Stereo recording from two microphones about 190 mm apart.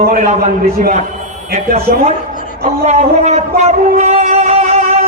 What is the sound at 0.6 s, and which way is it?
Speech, 50° right (ahead or behind).